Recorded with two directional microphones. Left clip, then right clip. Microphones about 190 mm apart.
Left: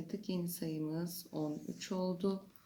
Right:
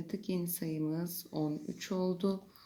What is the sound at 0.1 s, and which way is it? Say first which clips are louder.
Speech: right 4 dB; 30° right (ahead or behind).